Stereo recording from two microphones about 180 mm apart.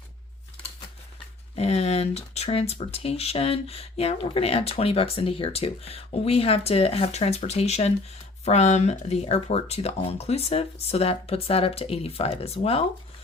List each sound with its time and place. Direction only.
1.5 s speech: 35° left (ahead or behind)